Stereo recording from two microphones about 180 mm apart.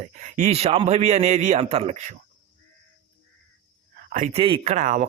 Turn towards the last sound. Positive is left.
turn(degrees=-40)  # may be behind; listen again after turning